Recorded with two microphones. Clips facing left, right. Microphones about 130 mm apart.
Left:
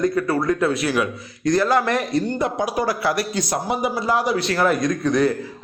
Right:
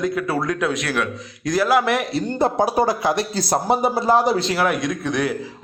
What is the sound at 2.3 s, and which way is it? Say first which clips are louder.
A man's voice: right 4 dB; 30° right (ahead or behind).